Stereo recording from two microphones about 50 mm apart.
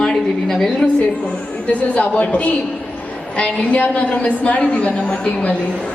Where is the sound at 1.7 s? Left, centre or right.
Left.